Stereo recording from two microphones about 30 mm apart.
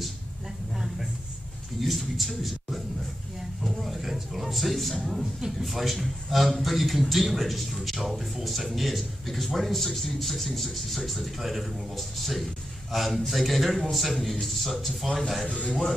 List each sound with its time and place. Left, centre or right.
1.8 s speech: centre
3.6 s roaring cats: centre
4.5 s a man's voice: centre
15.4 s a man's voice: left